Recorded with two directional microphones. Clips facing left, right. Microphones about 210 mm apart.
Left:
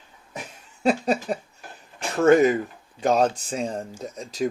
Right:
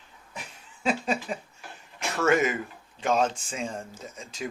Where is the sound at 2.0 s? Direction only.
35° left (ahead or behind).